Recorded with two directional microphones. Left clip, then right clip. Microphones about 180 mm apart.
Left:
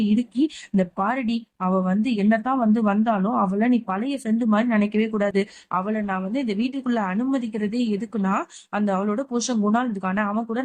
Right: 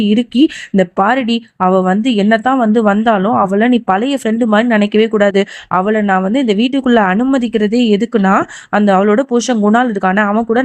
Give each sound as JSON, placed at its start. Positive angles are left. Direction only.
{"t": 0.2, "sound": "speech", "side_deg": -35}